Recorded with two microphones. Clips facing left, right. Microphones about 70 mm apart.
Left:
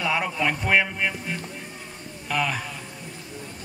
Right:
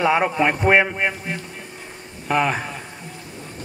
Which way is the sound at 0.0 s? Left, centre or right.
Right.